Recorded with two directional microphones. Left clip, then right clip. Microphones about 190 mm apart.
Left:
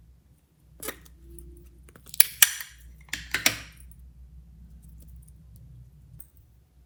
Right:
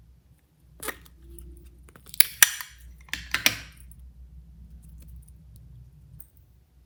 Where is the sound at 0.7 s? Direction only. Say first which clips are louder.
Right 3 dB; 15° right (ahead or behind).